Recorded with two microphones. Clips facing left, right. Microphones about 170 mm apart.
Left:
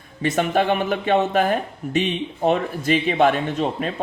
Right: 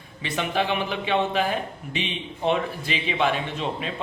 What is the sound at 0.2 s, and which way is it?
Speech, 45° left (ahead or behind).